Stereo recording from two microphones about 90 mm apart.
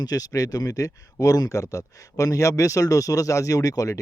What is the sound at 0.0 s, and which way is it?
Speech, 40° left (ahead or behind).